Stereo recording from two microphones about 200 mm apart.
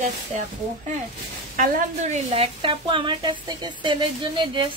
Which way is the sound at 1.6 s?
40° right (ahead or behind).